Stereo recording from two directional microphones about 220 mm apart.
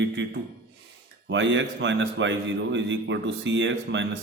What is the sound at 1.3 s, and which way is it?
A man's voice, 55° right (ahead or behind).